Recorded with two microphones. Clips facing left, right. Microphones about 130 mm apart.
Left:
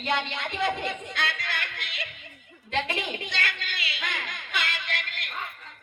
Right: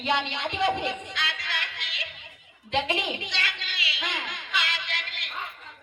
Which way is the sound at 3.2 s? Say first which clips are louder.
Left 2 dB; 50° left (ahead or behind).